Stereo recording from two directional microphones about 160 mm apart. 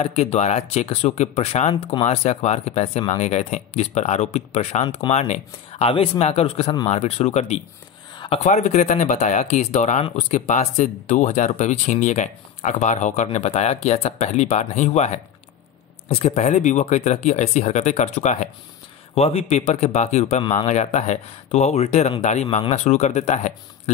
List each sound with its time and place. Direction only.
0.0 s speech: 40° left (ahead or behind)
19.1 s speech: 35° left (ahead or behind)